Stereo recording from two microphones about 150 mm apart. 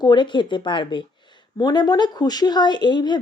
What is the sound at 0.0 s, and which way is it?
Speech, 30° left (ahead or behind).